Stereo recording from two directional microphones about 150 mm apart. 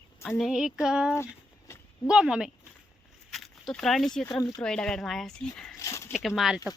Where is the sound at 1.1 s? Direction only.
20° left (ahead or behind).